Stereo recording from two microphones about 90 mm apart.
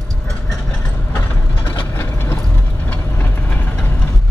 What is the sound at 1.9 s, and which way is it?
Vehicle, 25° left (ahead or behind).